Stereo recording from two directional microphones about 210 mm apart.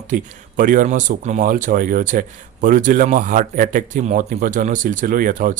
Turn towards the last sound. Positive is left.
turn(degrees=-40)  # may be behind; listen again after turning